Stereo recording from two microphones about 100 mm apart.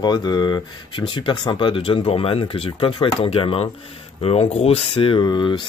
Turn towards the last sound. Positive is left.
turn(degrees=50)  # may be behind; listen again after turning